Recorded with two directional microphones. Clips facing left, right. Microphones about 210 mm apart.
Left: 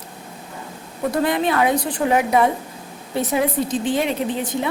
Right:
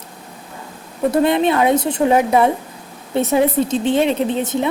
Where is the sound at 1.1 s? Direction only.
25° right (ahead or behind).